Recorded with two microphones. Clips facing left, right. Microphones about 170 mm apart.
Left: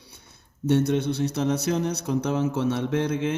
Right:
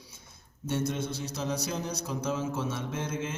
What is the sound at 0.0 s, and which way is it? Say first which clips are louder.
Speech: left 2 dB; 65° left (ahead or behind).